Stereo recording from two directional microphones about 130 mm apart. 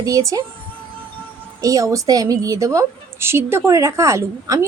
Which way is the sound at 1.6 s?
25° right (ahead or behind).